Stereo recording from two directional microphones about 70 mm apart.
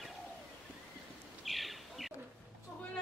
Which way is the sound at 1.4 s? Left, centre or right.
Centre.